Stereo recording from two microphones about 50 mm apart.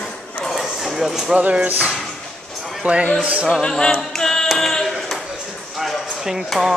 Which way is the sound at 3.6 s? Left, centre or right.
Centre.